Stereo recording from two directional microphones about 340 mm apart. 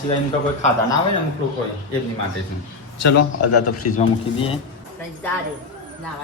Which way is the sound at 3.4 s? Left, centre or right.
Left.